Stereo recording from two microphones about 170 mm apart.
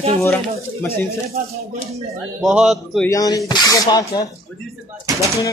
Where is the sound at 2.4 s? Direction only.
5° right (ahead or behind).